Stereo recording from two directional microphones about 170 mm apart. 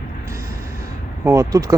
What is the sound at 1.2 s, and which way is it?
Speech, 20° right (ahead or behind).